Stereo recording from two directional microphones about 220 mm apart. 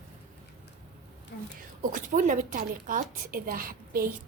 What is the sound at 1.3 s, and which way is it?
Speech, 45° left (ahead or behind).